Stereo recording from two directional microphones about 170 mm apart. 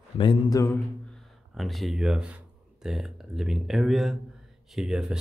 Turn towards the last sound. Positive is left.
turn(degrees=-5)  # may be behind; listen again after turning